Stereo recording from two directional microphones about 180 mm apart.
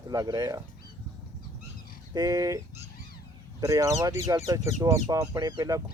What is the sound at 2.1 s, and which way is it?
Speech, 20° right (ahead or behind).